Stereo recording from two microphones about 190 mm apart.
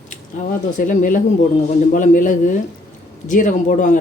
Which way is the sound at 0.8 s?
45° left (ahead or behind).